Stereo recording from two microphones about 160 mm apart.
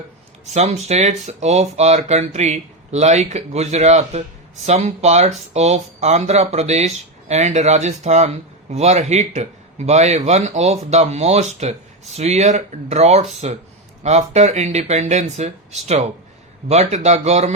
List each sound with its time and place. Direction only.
0.4 s speech: 45° right (ahead or behind)